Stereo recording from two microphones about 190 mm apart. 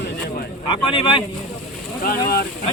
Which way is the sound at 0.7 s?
25° left (ahead or behind).